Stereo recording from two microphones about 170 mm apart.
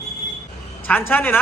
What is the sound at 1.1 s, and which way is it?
Speech, 10° left (ahead or behind).